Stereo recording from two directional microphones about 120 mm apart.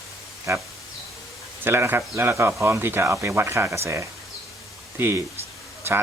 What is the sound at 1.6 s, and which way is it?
Speech, 20° right (ahead or behind).